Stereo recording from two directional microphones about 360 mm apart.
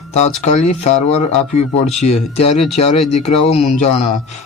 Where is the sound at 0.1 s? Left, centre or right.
Centre.